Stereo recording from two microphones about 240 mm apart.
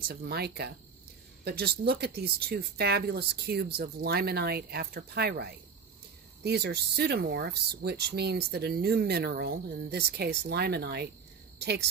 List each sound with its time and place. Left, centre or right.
0.1 s speech: right